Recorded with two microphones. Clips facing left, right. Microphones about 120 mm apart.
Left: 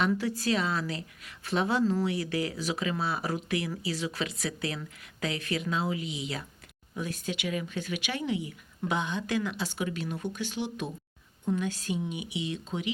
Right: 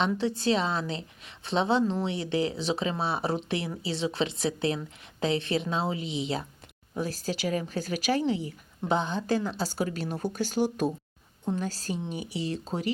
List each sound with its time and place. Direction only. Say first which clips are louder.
0.0 s a woman's voice: right 1 dB; 25° right (ahead or behind)